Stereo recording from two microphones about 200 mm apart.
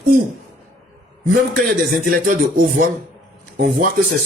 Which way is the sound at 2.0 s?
45° right (ahead or behind).